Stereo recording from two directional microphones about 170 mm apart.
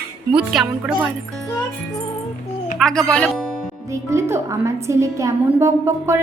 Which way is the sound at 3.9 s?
15° right (ahead or behind).